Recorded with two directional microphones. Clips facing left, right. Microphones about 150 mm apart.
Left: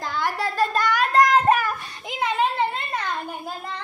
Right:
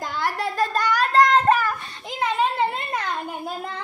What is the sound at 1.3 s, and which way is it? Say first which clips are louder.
Child singing: even; 10° left (ahead or behind).